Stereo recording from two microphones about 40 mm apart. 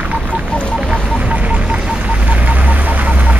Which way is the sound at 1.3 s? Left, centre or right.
Right.